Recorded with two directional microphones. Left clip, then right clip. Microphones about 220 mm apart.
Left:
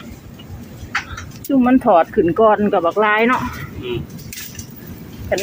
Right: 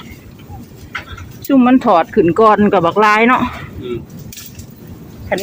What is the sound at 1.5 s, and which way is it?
Speech, 15° right (ahead or behind).